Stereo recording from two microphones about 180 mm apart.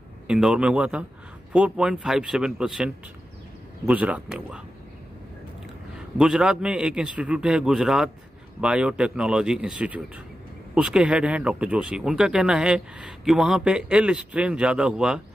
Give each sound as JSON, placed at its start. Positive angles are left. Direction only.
{"t": 0.3, "sound": "speech", "side_deg": -5}
{"t": 6.1, "sound": "speech", "side_deg": 0}